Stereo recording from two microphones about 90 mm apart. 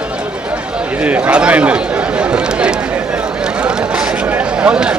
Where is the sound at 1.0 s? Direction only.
15° right (ahead or behind).